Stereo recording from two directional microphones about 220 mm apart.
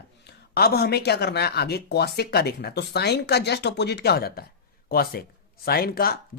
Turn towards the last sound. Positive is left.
turn(degrees=45)  # may be behind; listen again after turning